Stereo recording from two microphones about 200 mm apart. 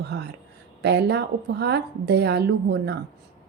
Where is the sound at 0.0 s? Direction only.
55° right (ahead or behind).